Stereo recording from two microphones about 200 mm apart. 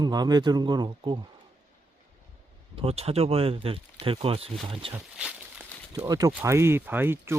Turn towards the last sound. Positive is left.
turn(degrees=-10)  # may be behind; listen again after turning